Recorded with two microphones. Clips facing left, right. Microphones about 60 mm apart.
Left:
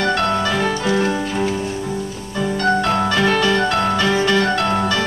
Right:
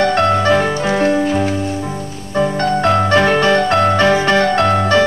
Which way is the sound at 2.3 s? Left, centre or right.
Right.